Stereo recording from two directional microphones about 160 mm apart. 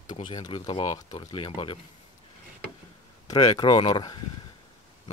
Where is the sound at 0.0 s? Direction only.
30° left (ahead or behind).